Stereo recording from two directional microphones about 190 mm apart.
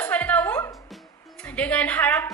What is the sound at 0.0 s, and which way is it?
Music, 10° left (ahead or behind).